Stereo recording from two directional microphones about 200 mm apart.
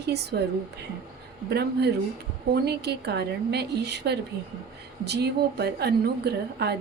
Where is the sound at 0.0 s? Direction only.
55° right (ahead or behind).